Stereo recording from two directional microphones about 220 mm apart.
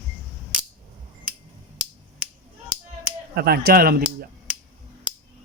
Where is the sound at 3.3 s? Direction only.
45° right (ahead or behind).